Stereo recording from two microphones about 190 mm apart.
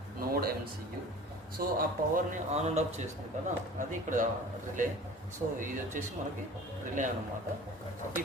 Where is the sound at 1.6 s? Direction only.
50° right (ahead or behind).